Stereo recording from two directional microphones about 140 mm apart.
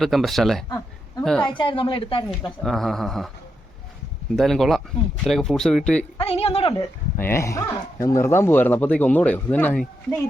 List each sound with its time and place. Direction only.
0.0 s speech: centre (ahead or behind)
1.5 s a woman's voice: 35° left (ahead or behind)
2.6 s speech: centre (ahead or behind)
4.4 s speech: centre (ahead or behind)
6.1 s speech: 45° left (ahead or behind)
7.2 s speech: 15° left (ahead or behind)